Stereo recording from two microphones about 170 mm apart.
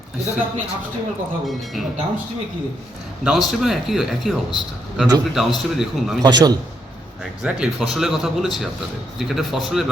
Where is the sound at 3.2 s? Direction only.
Centre (ahead or behind).